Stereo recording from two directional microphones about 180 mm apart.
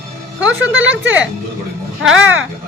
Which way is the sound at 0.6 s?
90° right.